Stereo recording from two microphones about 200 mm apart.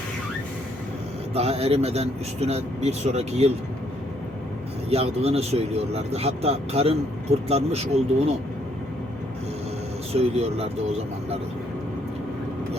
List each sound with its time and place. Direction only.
1.3 s speech: 30° right (ahead or behind)
4.9 s speech: 30° right (ahead or behind)
10.2 s speech: 30° right (ahead or behind)